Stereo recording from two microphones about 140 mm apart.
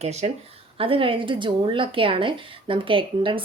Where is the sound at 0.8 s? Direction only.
40° right (ahead or behind).